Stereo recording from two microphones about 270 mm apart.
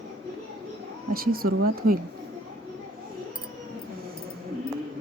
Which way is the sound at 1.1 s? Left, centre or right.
Right.